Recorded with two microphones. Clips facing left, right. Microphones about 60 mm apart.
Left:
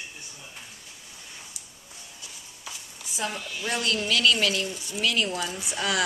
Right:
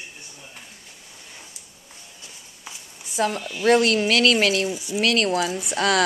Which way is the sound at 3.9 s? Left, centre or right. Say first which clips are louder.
Right 5 dB; right.